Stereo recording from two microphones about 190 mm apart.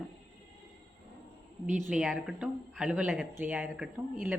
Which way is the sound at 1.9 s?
5° right (ahead or behind).